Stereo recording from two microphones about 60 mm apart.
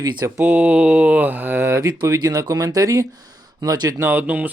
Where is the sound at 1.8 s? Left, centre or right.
Right.